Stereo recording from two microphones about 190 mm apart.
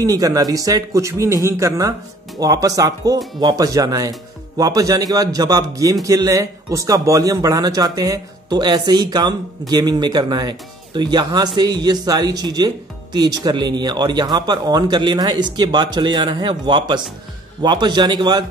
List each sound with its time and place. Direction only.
0.0 s a man's voice: 20° right (ahead or behind)